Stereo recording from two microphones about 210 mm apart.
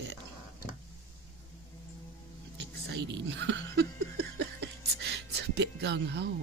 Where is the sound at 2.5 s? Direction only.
55° right (ahead or behind).